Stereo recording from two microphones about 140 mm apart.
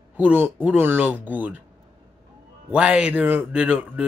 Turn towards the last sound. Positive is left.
turn(degrees=-10)  # may be behind; listen again after turning